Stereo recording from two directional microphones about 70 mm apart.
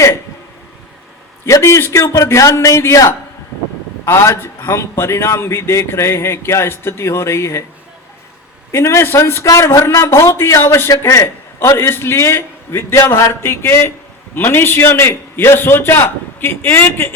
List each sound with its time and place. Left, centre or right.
1.5 s a man's voice: left
8.7 s a man's voice: left